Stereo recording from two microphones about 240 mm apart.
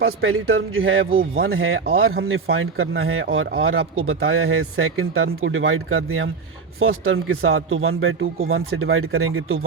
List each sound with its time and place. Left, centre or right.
0.0 s a man's voice: right